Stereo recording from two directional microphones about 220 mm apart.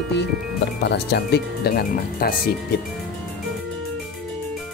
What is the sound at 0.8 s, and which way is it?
Speech, 50° left (ahead or behind).